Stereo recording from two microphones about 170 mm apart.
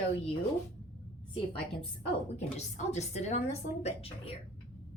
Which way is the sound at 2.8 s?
40° left (ahead or behind).